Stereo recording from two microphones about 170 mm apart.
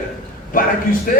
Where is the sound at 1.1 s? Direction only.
55° left (ahead or behind).